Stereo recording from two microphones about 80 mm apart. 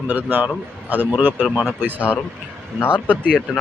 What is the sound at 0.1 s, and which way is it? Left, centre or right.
A man's voice, right.